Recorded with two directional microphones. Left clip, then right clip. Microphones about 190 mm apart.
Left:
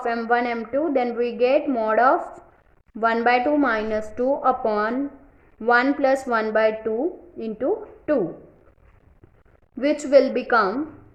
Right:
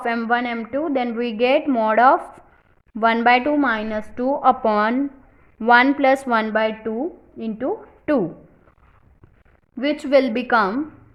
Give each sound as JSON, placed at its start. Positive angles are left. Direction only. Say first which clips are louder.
{"t": 0.0, "sound": "a woman's voice", "louder": "right 1 dB", "side_deg": -30}
{"t": 8.1, "sound": "a woman's voice", "louder": "right 2 dB", "side_deg": -35}
{"t": 9.7, "sound": "a woman's voice", "louder": "right 1 dB", "side_deg": -20}
{"t": 10.2, "sound": "a woman's voice", "louder": "even", "side_deg": -30}